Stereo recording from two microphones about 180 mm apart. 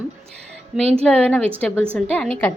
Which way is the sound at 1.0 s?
5° left (ahead or behind).